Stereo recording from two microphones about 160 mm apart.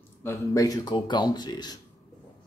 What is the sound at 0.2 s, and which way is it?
Speech, 20° left (ahead or behind).